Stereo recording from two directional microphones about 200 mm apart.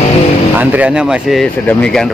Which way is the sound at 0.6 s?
5° right (ahead or behind).